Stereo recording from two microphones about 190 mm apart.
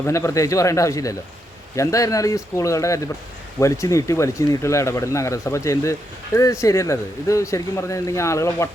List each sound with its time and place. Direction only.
0.0 s speech: 15° left (ahead or behind)